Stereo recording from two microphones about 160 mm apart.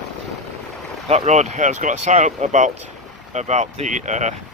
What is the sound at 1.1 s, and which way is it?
Speech, 45° right (ahead or behind).